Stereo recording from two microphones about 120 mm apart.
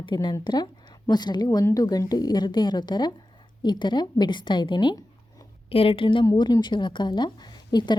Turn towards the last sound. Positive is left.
turn(degrees=35)  # may be behind; listen again after turning